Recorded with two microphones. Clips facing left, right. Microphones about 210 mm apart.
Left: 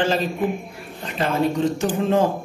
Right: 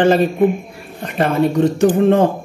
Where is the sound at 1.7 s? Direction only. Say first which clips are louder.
Right 8 dB; 65° right (ahead or behind).